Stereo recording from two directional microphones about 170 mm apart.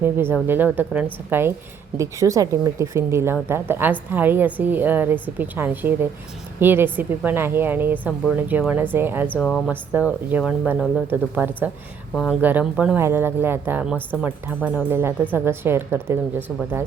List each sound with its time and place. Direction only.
0.0 s speech: 15° right (ahead or behind)
9.3 s speech: 5° left (ahead or behind)
9.9 s speech: 10° right (ahead or behind)